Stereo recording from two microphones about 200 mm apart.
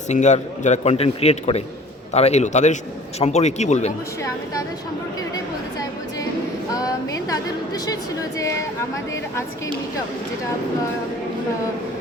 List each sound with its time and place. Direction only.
0.1 s a man's voice: 35° left (ahead or behind)
6.7 s a woman's voice: 15° left (ahead or behind)